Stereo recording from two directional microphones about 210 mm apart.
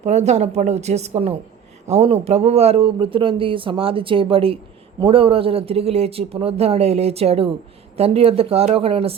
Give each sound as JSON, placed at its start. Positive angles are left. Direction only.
{"t": 0.0, "sound": "a woman's voice", "side_deg": -35}